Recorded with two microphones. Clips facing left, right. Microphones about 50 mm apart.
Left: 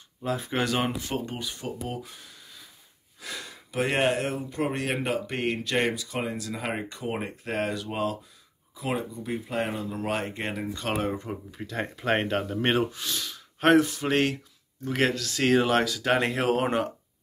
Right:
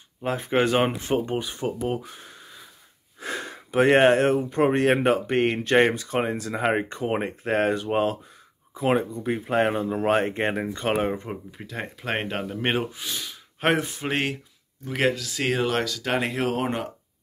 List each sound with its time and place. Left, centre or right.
0.2 s speech: right
1.8 s speech: right
11.5 s speech: centre